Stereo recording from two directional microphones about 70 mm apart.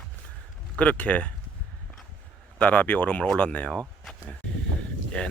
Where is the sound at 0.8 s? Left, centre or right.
Centre.